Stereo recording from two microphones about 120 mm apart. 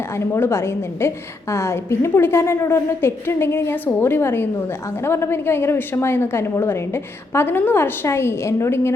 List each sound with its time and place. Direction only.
0.3 s a woman's voice: 20° left (ahead or behind)